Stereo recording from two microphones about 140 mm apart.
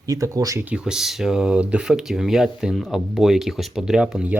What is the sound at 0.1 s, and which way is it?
Speech, 25° right (ahead or behind).